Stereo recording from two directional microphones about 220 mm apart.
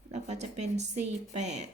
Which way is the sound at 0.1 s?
30° right (ahead or behind).